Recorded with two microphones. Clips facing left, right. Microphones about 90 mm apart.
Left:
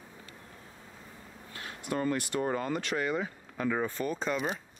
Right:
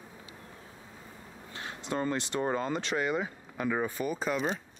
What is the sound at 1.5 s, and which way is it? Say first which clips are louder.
Speech: even; 25° right (ahead or behind).